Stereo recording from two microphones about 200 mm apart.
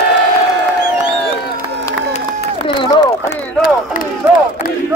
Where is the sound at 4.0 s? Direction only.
40° left (ahead or behind).